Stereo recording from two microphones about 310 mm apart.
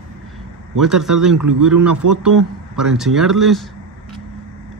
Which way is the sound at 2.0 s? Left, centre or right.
Right.